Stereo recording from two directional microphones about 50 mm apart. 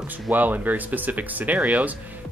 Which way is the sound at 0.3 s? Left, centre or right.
Right.